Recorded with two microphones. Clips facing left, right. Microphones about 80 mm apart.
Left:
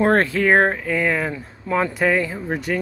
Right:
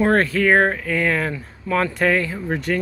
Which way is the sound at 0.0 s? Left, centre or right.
Left.